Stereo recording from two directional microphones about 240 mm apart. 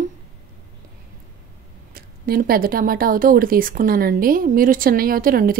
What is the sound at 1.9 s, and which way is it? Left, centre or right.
Speech, right.